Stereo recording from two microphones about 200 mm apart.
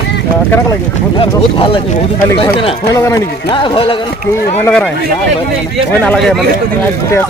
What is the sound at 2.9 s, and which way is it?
Speech, 15° left (ahead or behind).